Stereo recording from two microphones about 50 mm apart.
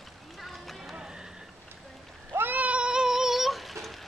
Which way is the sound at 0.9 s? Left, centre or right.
Centre.